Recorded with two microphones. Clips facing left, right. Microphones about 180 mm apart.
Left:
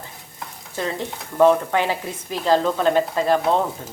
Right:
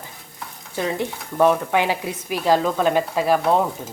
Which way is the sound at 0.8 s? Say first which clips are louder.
Right 2 dB; 15° right (ahead or behind).